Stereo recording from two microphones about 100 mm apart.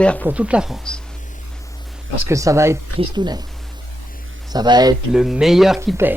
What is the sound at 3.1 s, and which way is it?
Speech, 45° right (ahead or behind).